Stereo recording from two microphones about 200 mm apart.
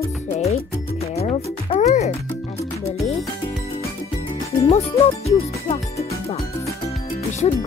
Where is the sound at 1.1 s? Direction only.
30° left (ahead or behind).